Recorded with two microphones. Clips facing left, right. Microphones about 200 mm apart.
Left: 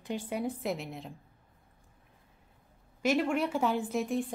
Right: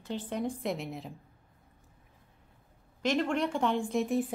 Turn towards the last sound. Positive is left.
turn(degrees=0)  # may be behind; listen again after turning